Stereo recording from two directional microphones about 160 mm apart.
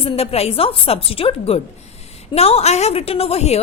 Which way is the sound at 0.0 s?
40° left (ahead or behind).